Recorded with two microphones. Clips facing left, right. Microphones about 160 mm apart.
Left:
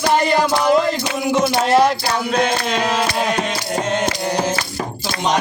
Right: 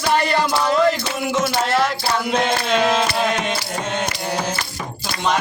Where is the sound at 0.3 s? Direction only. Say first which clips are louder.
Left 4 dB; 15° left (ahead or behind).